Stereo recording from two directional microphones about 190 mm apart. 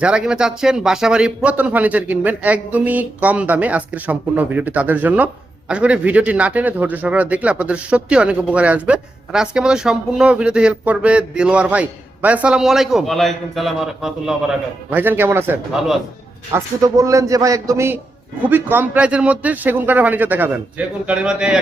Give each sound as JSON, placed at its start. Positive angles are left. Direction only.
{"t": 0.0, "sound": "speech", "side_deg": -5}